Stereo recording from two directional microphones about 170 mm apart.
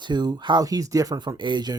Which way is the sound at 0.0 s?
25° right (ahead or behind).